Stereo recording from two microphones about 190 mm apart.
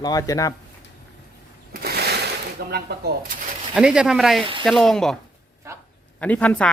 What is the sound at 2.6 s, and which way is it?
Speech, 55° right (ahead or behind).